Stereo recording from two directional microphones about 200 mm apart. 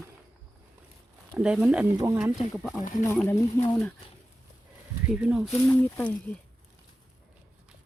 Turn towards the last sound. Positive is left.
turn(degrees=10)  # may be behind; listen again after turning